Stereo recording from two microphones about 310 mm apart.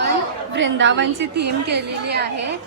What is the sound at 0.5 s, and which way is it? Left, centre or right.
A woman's voice, right.